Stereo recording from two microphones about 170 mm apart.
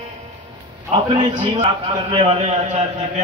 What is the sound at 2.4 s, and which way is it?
Speech, 40° right (ahead or behind).